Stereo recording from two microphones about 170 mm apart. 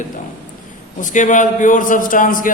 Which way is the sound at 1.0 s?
50° left (ahead or behind).